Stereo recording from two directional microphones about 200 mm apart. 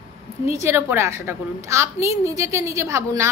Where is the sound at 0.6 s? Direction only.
15° right (ahead or behind).